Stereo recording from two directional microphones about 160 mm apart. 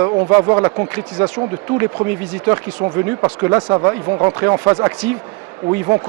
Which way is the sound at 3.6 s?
25° right (ahead or behind).